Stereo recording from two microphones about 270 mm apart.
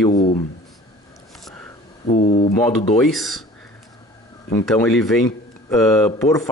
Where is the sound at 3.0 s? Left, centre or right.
Centre.